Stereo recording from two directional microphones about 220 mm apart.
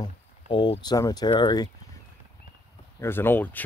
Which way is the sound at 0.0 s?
20° left (ahead or behind).